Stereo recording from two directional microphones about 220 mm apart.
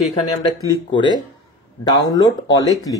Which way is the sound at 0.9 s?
20° left (ahead or behind).